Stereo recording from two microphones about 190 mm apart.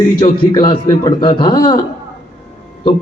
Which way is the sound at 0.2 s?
25° left (ahead or behind).